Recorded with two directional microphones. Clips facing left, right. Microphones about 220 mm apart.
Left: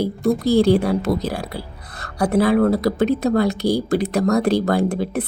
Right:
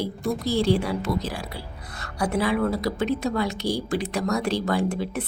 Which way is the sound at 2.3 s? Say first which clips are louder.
Left 8 dB; 40° left (ahead or behind).